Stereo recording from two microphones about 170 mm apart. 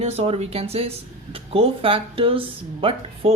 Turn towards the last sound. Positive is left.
turn(degrees=-35)  # may be behind; listen again after turning